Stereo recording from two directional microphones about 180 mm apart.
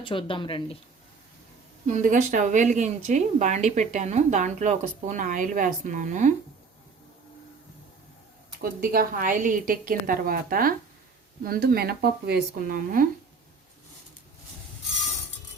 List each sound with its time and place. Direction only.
0.0 s speech: 30° left (ahead or behind)
1.9 s speech: 45° right (ahead or behind)
8.8 s speech: 55° right (ahead or behind)